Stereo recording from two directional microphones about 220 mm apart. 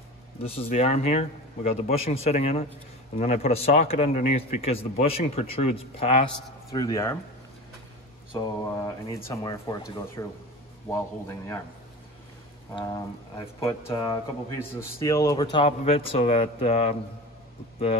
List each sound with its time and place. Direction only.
0.7 s speech: 30° left (ahead or behind)
6.7 s a man's voice: 15° left (ahead or behind)
8.4 s a man's voice: 15° left (ahead or behind)
12.7 s a man's voice: 15° left (ahead or behind)